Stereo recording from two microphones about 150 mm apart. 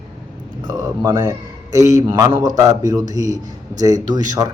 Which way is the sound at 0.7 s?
30° right (ahead or behind).